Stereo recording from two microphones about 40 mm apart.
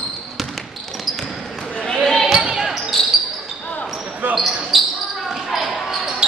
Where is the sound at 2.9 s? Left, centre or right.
Centre.